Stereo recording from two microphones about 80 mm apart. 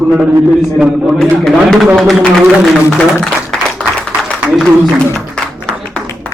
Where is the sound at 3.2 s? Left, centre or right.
Centre.